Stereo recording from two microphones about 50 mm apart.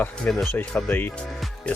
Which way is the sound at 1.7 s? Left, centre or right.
Left.